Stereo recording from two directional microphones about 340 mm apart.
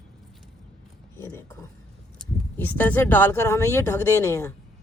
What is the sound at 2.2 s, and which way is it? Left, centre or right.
Speech, centre.